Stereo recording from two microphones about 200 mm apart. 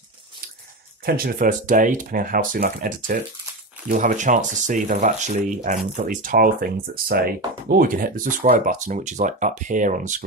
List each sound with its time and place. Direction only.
1.0 s speech: 50° right (ahead or behind)